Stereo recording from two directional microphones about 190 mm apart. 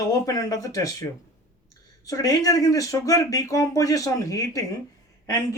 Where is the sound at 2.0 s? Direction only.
20° left (ahead or behind).